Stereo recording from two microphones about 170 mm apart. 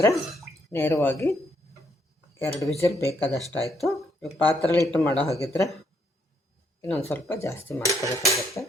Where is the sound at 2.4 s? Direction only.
20° left (ahead or behind).